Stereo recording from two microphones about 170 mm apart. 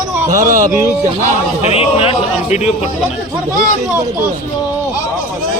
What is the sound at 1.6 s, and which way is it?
Speech, 35° left (ahead or behind).